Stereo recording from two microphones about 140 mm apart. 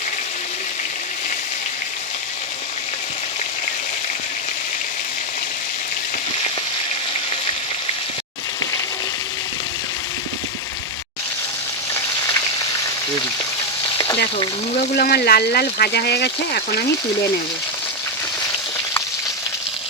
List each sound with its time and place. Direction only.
14.0 s frying: 30° left (ahead or behind)
14.9 s speech: 90° left